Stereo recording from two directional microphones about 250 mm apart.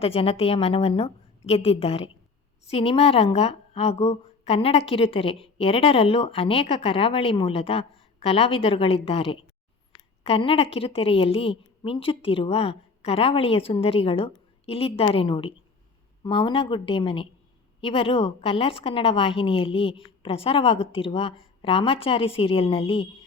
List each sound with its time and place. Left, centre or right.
0.0 s a woman's voice: left